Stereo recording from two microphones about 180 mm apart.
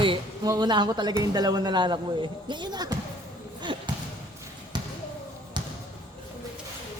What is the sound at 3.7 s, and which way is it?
Basketball bounce, 25° right (ahead or behind).